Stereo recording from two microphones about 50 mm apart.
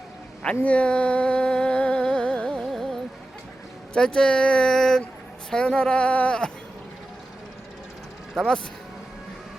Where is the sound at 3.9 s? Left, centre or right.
Centre.